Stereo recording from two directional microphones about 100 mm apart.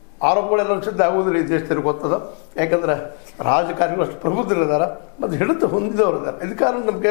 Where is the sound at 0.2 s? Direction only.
15° left (ahead or behind).